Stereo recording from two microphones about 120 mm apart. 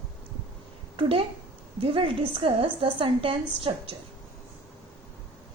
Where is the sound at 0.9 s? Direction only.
50° right (ahead or behind).